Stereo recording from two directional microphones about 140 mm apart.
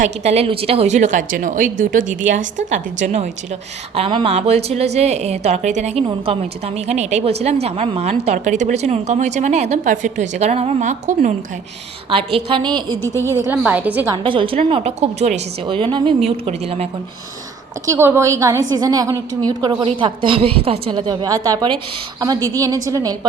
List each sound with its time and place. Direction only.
0.0 s a woman's voice: 50° right (ahead or behind)
3.9 s a woman's voice: 40° right (ahead or behind); by 11.3 s 60° right (ahead or behind)
12.1 s a woman's voice: 40° right (ahead or behind)
13.2 s a woman's voice: 20° right (ahead or behind)
14.3 s a woman's voice: 35° right (ahead or behind)
15.6 s a woman's voice: 35° right (ahead or behind)
17.8 s a woman's voice: 20° right (ahead or behind); by 21.0 s 40° right (ahead or behind)
21.1 s a woman's voice: 30° right (ahead or behind)